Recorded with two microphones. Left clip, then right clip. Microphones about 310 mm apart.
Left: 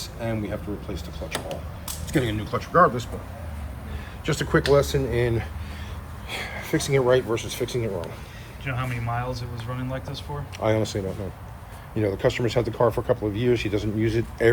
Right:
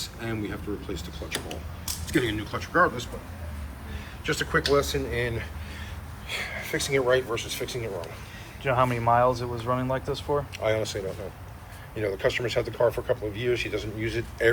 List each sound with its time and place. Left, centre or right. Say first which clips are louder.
0.2 s speech: left 5 dB; centre
0.9 s speech: left 2 dB; left
4.3 s speech: left 3 dB; left
8.6 s speech: right 8 dB; centre
10.6 s speech: left 2 dB; left